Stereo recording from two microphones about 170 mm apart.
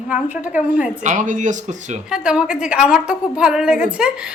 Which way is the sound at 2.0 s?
5° right (ahead or behind).